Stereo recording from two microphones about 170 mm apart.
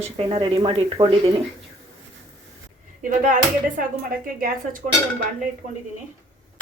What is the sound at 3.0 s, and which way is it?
A woman's voice, 50° right (ahead or behind).